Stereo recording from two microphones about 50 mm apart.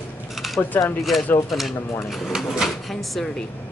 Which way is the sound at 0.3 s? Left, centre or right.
Centre.